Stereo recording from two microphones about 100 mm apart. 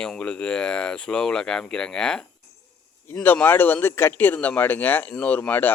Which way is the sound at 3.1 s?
20° left (ahead or behind).